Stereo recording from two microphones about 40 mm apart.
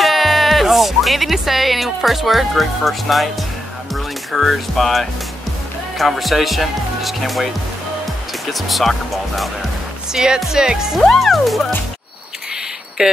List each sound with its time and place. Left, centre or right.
0.0 s speech: centre
10.1 s speech: centre
11.1 s speech: centre
13.0 s speech: centre